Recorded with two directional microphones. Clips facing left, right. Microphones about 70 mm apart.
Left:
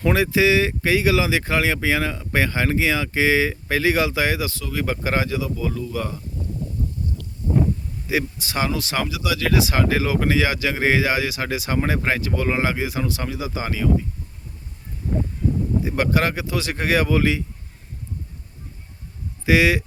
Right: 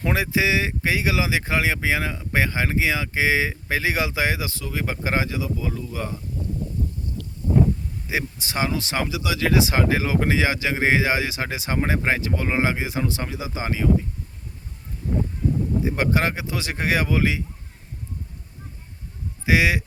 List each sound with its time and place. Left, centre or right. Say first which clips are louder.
0.0 s speech: left 4 dB; centre
8.1 s speech: left 3 dB; right
15.8 s speech: left 1 dB; right
19.5 s speech: left 3 dB; centre